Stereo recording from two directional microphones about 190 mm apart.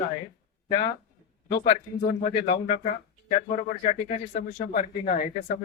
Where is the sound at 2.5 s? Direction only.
35° left (ahead or behind).